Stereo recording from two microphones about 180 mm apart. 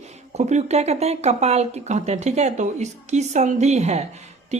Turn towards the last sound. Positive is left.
turn(degrees=-35)  # may be behind; listen again after turning